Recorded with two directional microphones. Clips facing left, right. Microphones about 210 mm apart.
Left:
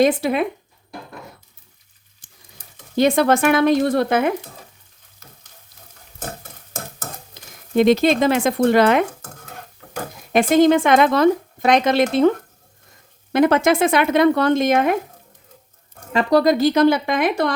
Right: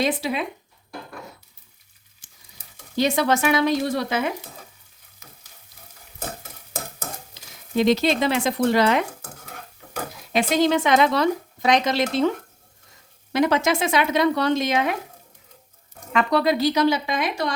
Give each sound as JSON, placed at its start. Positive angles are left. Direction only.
{"t": 0.0, "sound": "a woman's voice", "side_deg": 50}
{"t": 2.2, "sound": "sizzle", "side_deg": 55}
{"t": 2.9, "sound": "speech", "side_deg": 55}
{"t": 7.3, "sound": "speech", "side_deg": 55}
{"t": 10.3, "sound": "a woman's voice", "side_deg": 50}
{"t": 13.3, "sound": "a woman's voice", "side_deg": 55}
{"t": 16.1, "sound": "a woman's voice", "side_deg": 40}